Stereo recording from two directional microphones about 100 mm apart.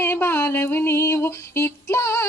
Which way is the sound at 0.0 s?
25° left (ahead or behind).